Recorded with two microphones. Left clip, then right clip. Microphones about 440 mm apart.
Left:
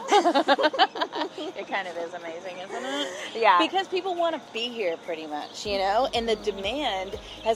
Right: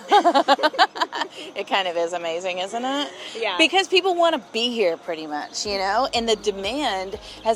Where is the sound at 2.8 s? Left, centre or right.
Right.